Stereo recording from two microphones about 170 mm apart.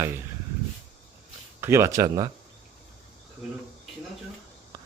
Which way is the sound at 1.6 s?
15° right (ahead or behind).